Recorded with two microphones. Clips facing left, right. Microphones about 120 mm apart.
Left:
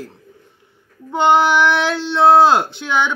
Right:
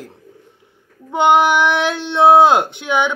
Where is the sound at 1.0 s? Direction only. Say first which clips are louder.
Right 1 dB; 15° right (ahead or behind).